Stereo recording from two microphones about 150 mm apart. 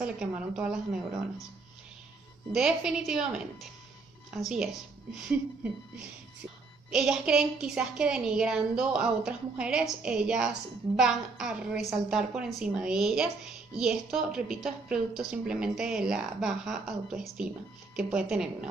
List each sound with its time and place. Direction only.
0.0 s speech: 5° right (ahead or behind)
2.5 s a woman's voice: 5° right (ahead or behind)